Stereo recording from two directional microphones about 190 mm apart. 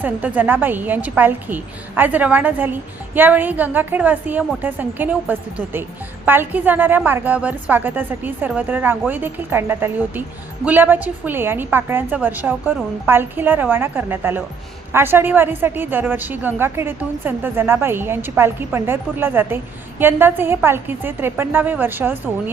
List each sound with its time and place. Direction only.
0.0 s a woman's voice: 10° right (ahead or behind)